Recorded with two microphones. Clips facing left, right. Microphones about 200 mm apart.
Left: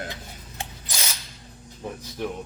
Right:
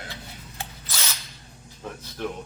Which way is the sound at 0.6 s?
15° left (ahead or behind).